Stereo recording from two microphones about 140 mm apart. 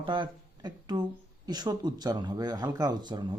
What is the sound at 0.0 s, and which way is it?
Speech, 35° right (ahead or behind).